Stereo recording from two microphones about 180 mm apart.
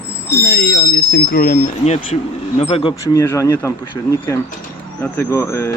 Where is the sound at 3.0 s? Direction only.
15° left (ahead or behind).